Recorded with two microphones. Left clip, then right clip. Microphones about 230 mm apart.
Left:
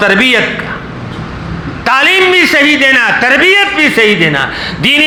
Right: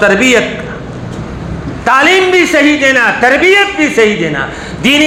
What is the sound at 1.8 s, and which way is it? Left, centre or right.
A man's voice, left.